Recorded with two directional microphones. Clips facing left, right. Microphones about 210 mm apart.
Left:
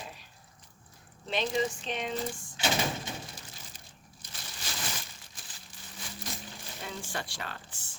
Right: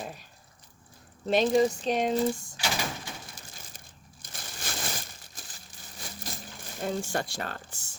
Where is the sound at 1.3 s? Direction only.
45° right (ahead or behind).